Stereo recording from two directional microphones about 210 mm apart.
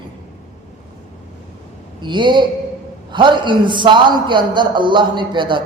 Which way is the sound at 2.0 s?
20° right (ahead or behind).